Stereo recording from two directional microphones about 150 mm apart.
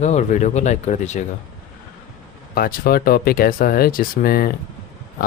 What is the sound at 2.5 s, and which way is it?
Speech, 80° left.